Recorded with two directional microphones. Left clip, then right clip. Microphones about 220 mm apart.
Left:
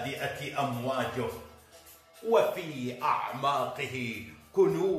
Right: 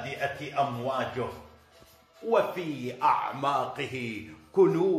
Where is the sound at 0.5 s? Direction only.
10° right (ahead or behind).